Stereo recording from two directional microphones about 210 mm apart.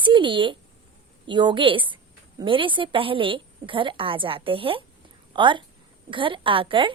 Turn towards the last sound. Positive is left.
turn(degrees=-25)  # may be behind; listen again after turning